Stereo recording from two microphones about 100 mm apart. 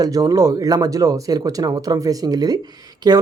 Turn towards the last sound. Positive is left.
turn(degrees=-40)  # may be behind; listen again after turning